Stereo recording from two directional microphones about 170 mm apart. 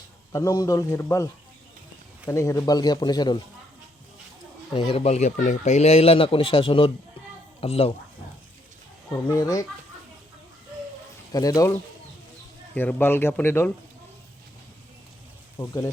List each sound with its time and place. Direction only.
0.3 s speech: 20° left (ahead or behind)
2.3 s speech: 15° left (ahead or behind)
4.7 s speech: 35° left (ahead or behind)
9.3 s speech: 20° left (ahead or behind)
11.3 s speech: 20° left (ahead or behind)
15.5 s speech: 20° left (ahead or behind)